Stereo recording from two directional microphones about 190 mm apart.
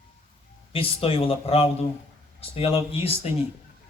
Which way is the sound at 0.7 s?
30° left (ahead or behind).